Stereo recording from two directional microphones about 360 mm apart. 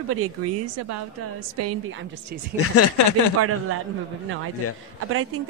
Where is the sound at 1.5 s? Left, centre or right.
Right.